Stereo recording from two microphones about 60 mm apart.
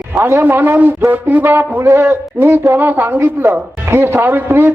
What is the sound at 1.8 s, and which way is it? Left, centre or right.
Speech, right.